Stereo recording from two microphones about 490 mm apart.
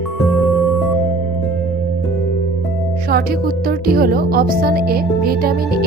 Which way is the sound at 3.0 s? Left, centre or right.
Centre.